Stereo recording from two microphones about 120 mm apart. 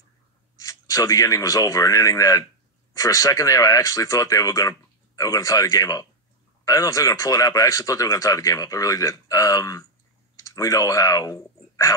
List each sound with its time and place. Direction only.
0.6 s a man's voice: 30° left (ahead or behind)